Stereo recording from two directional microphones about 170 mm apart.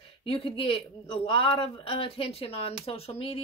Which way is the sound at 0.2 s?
30° left (ahead or behind).